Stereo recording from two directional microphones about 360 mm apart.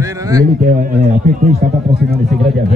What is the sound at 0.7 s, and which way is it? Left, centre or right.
Speech, right.